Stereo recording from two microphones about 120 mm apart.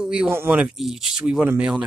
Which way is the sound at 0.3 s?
15° right (ahead or behind).